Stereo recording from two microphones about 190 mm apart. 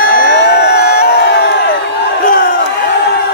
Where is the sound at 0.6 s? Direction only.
55° left (ahead or behind).